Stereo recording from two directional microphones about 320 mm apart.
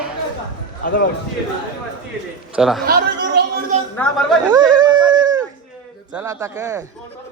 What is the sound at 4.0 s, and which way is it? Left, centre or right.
Speech, centre.